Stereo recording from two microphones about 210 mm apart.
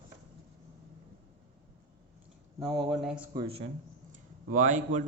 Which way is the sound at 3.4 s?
25° right (ahead or behind).